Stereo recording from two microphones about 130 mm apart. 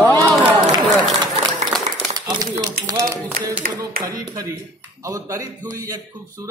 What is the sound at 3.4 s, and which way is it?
Speech, 90° right.